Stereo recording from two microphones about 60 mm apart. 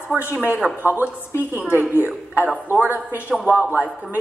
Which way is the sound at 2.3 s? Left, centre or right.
Right.